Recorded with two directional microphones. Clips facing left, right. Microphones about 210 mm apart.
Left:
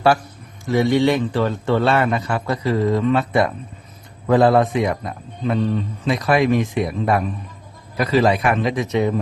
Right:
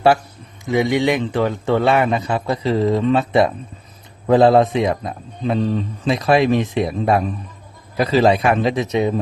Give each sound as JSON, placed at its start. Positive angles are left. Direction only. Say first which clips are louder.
{"t": 0.6, "sound": "a man's voice", "louder": "left 1 dB", "side_deg": -15}